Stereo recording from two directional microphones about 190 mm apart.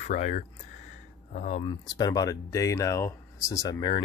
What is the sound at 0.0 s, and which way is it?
Speech, 40° left (ahead or behind).